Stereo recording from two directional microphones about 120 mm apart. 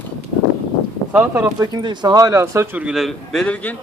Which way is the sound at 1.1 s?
15° right (ahead or behind).